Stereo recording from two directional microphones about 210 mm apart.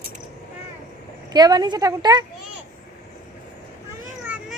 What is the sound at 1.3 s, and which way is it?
Speech, 20° right (ahead or behind).